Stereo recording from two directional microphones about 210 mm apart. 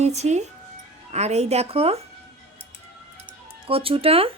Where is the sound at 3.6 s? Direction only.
25° right (ahead or behind).